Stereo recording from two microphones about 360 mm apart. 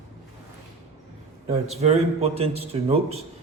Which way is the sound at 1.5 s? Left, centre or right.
Centre.